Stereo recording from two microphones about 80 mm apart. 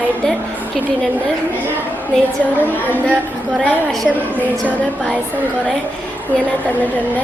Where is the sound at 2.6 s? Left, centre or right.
Right.